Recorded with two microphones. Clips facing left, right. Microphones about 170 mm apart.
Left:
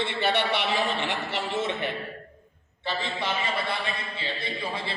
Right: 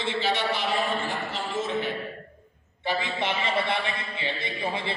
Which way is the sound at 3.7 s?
20° right (ahead or behind).